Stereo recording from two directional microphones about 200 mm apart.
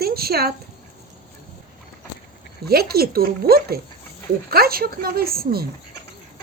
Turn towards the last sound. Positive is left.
turn(degrees=-50)  # may be behind; listen again after turning